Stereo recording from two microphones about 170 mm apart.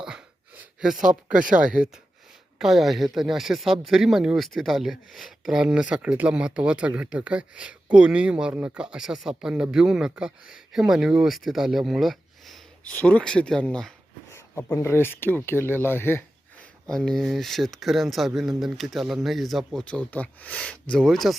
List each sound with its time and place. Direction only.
0.0 s a sound: 5° right (ahead or behind)
1.4 s speech: 50° right (ahead or behind)
1.6 s speech: 5° right (ahead or behind); by 16.2 s 15° left (ahead or behind)
16.9 s speech: centre (ahead or behind)